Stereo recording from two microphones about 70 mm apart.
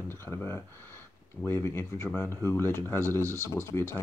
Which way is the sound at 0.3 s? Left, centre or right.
Left.